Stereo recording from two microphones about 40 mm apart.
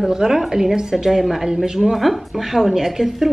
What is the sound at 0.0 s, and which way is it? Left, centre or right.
A woman's voice, centre.